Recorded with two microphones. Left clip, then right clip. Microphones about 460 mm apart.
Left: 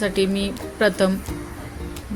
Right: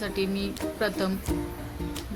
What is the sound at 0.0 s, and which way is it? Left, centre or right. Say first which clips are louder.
A man's voice: left 8 dB; right.